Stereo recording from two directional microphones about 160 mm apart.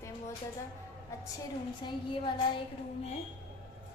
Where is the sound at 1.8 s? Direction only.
30° left (ahead or behind).